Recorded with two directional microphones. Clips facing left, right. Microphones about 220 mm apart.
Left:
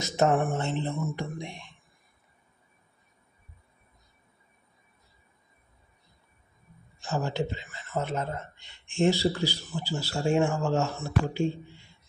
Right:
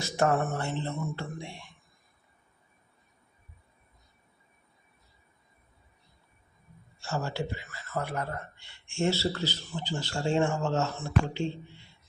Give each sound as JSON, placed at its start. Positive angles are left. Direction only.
{"t": 0.0, "sound": "speech", "side_deg": 20}
{"t": 7.0, "sound": "a man's voice", "side_deg": 15}